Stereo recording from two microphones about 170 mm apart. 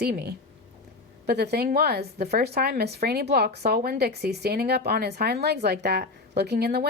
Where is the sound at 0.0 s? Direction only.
70° right (ahead or behind).